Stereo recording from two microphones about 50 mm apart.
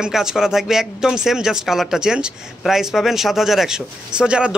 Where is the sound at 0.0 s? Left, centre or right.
Centre.